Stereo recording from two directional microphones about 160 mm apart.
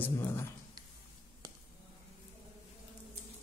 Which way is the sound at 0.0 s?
15° left (ahead or behind).